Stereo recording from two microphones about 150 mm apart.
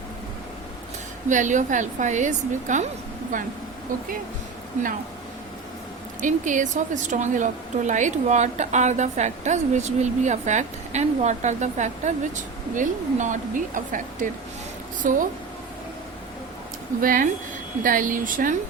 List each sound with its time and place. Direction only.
1.3 s a woman's voice: 55° right (ahead or behind)
3.3 s a woman's voice: 65° right (ahead or behind)
6.2 s a woman's voice: 55° right (ahead or behind)
17.0 s a woman's voice: 65° right (ahead or behind)